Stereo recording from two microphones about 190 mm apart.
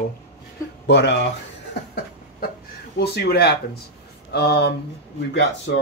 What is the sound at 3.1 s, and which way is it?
Speech, 55° left (ahead or behind).